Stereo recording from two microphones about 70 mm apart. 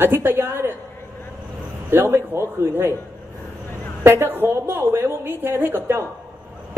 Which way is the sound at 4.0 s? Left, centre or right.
Right.